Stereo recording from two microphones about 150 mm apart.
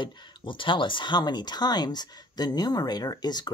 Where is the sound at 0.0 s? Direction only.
30° left (ahead or behind).